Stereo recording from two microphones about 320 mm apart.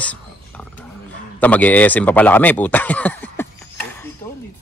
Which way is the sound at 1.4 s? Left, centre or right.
Centre.